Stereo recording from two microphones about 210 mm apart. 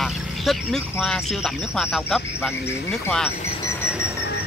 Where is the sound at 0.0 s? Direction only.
Centre (ahead or behind).